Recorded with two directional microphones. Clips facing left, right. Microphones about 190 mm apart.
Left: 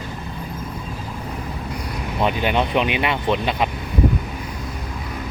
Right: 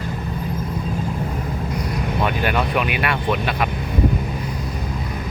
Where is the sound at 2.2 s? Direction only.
20° left (ahead or behind).